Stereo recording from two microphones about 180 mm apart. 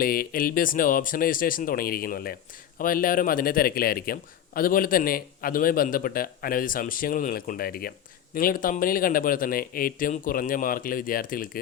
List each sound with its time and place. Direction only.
0.0 s a man's voice: 55° left (ahead or behind)